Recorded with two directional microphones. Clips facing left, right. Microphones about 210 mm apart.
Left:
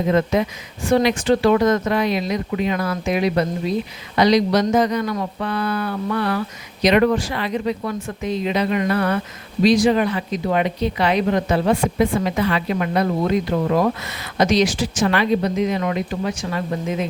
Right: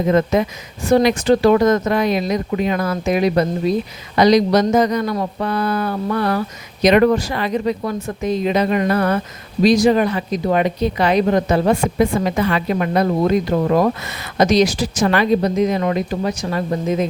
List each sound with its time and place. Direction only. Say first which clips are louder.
0.1 s a woman's voice: right 2 dB; 45° right (ahead or behind)